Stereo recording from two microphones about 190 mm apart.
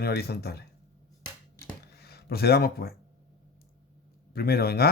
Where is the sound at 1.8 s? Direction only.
55° left (ahead or behind).